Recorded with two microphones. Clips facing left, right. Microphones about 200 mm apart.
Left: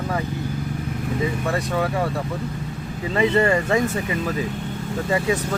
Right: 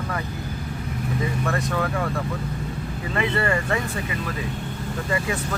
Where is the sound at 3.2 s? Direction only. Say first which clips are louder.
Left 6 dB; 25° left (ahead or behind).